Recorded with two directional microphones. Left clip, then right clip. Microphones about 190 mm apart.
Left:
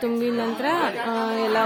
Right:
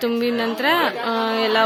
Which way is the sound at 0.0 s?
5° left (ahead or behind).